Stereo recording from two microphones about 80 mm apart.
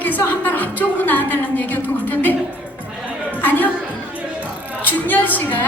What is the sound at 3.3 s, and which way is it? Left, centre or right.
Chatter, left.